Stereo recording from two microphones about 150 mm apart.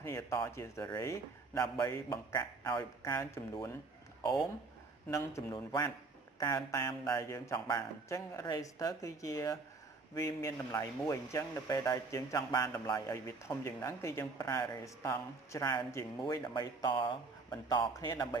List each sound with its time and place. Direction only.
0.0 s speech: 20° left (ahead or behind)
5.1 s speech: 20° left (ahead or behind)